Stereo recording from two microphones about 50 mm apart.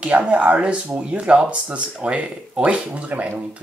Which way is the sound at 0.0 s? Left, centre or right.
Right.